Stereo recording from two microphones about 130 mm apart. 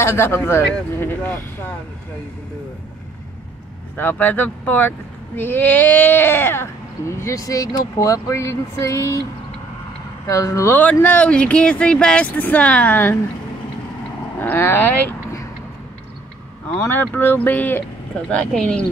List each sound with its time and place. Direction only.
0.0 s speech: 20° left (ahead or behind)
3.9 s speech: 15° left (ahead or behind)
10.2 s speech: 25° left (ahead or behind)
14.4 s speech: 15° left (ahead or behind)
16.8 s speech: 15° left (ahead or behind)